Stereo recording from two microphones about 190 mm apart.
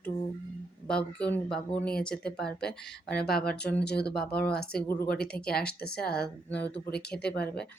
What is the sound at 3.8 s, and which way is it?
Speech, 60° left (ahead or behind).